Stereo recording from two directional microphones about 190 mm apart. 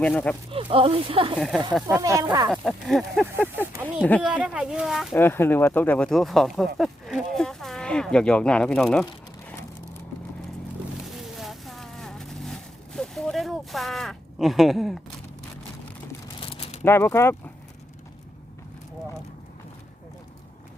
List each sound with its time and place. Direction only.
0.0 s speech: 5° left (ahead or behind)
0.5 s speech: 30° right (ahead or behind)
1.4 s speech: centre (ahead or behind)
1.9 s speech: 15° right (ahead or behind)
2.5 s speech: centre (ahead or behind)
4.2 s speech: 5° right (ahead or behind)
5.1 s speech: 10° left (ahead or behind)
6.7 s a sound: centre (ahead or behind)
11.0 s vehicle: centre (ahead or behind)
16.4 s a sound: 30° left (ahead or behind)
16.8 s speech: 15° left (ahead or behind)